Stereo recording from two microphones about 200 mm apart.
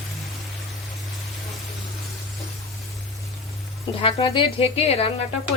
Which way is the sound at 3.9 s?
25° left (ahead or behind).